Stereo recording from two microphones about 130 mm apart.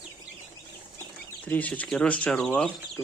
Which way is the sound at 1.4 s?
10° left (ahead or behind).